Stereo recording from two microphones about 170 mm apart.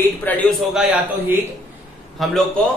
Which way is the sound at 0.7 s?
5° right (ahead or behind).